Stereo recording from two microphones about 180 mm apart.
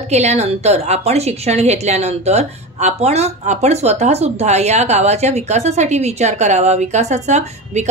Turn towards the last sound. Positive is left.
turn(degrees=-40)  # may be behind; listen again after turning